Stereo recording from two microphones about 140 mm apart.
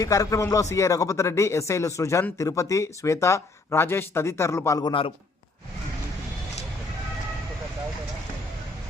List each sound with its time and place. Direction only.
0.0 s speech: 25° left (ahead or behind)